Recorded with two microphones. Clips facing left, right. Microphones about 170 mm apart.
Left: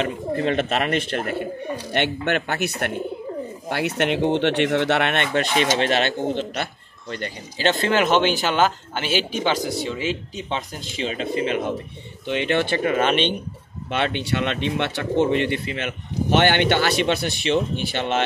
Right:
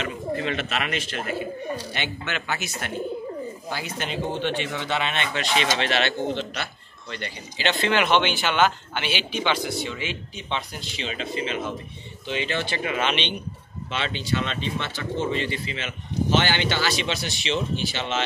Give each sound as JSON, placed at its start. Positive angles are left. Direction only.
{"t": 0.0, "sound": "speech", "side_deg": 50}
{"t": 12.7, "sound": "speech", "side_deg": 45}